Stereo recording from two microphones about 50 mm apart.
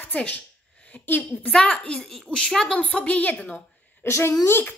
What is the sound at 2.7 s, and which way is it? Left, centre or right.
Speech, left.